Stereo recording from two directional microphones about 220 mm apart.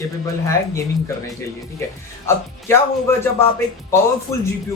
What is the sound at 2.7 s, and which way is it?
Speech, 10° left (ahead or behind).